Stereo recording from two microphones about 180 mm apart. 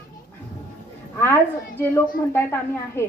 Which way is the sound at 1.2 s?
15° left (ahead or behind).